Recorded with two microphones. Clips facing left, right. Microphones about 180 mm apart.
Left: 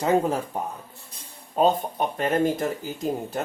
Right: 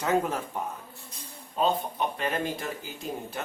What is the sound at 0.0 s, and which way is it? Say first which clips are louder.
Speech: left 5 dB; 30° left (ahead or behind).